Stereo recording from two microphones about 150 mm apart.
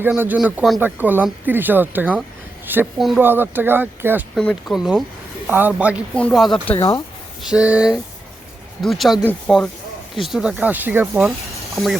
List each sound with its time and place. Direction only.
0.1 s speech: 5° right (ahead or behind)
4.4 s speech: centre (ahead or behind)
6.1 s speech: 5° left (ahead or behind)
6.7 s speech: 35° left (ahead or behind)
7.4 s speech: 5° right (ahead or behind)
11.7 s speech: centre (ahead or behind)